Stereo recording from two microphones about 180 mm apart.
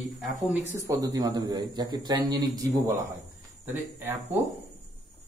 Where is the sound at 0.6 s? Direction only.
15° right (ahead or behind).